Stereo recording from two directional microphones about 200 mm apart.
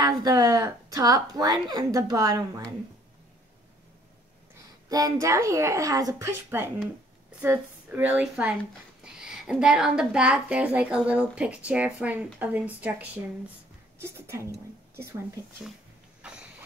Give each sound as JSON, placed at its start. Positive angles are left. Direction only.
{"t": 0.0, "sound": "a woman's voice", "side_deg": -20}
{"t": 4.8, "sound": "a woman's voice", "side_deg": -20}
{"t": 16.2, "sound": "a sound", "side_deg": -5}